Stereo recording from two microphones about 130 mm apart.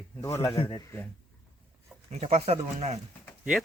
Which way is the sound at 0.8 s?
20° left (ahead or behind).